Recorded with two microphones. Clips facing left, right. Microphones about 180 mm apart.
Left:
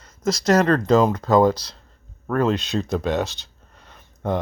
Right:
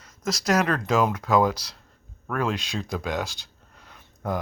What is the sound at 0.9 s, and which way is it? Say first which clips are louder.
Speech: left 4 dB; 20° left (ahead or behind).